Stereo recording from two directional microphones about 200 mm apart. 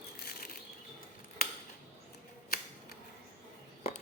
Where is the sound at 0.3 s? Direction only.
45° left (ahead or behind).